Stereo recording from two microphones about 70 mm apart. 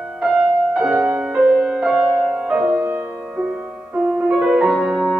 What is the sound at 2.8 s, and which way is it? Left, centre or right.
Music, right.